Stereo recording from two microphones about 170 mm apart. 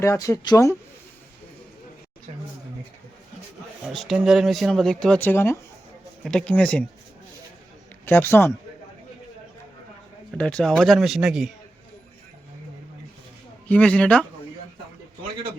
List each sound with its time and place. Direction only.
0.0 s speech: 15° left (ahead or behind)
3.8 s speech: centre (ahead or behind)
8.0 s speech: 15° left (ahead or behind)
10.3 s speech: 5° left (ahead or behind)
13.7 s speech: 5° left (ahead or behind)